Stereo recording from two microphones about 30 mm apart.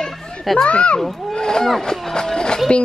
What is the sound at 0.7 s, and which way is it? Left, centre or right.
Speech, left.